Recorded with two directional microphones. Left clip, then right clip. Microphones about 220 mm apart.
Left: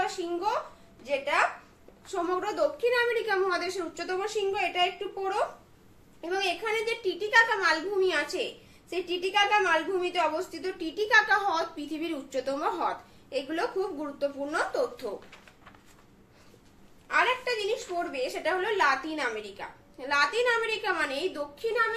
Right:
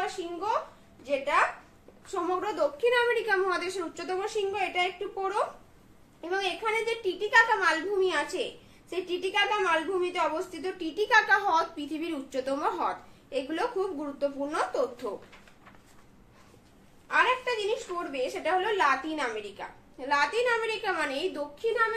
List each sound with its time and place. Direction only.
0.0 s a child's voice: 10° right (ahead or behind)
17.1 s a woman's voice: 15° right (ahead or behind)